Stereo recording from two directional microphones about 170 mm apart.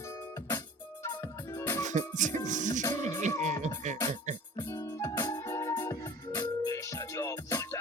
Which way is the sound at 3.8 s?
45° right (ahead or behind).